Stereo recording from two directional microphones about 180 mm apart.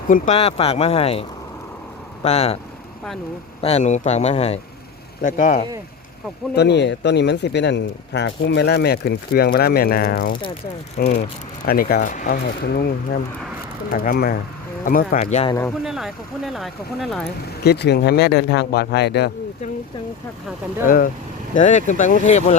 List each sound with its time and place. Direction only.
0.1 s speech: 35° left (ahead or behind)
2.2 s speech: 35° left (ahead or behind)
3.6 s speech: 35° left (ahead or behind)
6.5 s speech: 70° left (ahead or behind); by 15.4 s 40° left (ahead or behind)
15.8 s speech: centre (ahead or behind)
17.6 s speech: 65° left (ahead or behind)
20.8 s speech: 50° left (ahead or behind)